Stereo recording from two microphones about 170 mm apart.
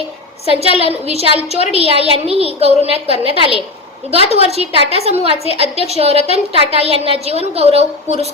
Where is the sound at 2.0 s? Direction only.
35° right (ahead or behind).